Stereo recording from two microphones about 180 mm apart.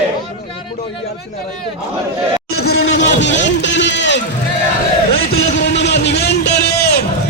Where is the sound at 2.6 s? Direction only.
75° left (ahead or behind).